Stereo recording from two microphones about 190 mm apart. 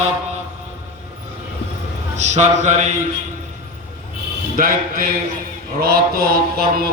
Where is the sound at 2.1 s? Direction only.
35° right (ahead or behind).